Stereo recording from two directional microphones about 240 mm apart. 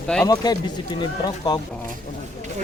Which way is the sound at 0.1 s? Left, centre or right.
Centre.